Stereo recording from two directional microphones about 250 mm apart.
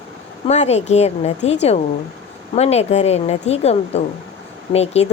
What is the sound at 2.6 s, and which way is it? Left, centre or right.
A woman's voice, left.